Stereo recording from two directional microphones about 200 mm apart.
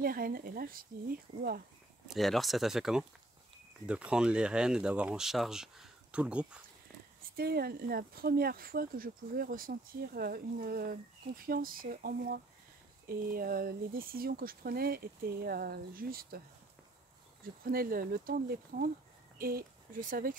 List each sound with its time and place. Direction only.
0.0 s speech: 45° right (ahead or behind)
2.0 s speech: centre (ahead or behind)
7.3 s speech: 50° right (ahead or behind)
17.6 s speech: 45° right (ahead or behind)